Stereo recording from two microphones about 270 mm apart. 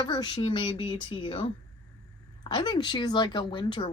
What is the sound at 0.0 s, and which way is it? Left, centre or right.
A woman's voice, centre.